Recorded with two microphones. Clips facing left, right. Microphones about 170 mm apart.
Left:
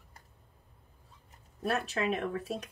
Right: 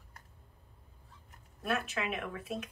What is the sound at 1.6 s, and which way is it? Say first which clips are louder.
Speech: left 3 dB; 35° left (ahead or behind).